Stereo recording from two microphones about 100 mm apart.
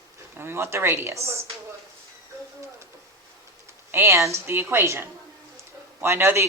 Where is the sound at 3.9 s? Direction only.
25° right (ahead or behind).